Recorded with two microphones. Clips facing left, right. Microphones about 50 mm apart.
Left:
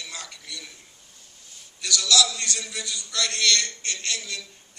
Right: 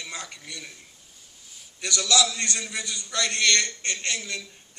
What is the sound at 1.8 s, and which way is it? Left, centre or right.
A man's voice, right.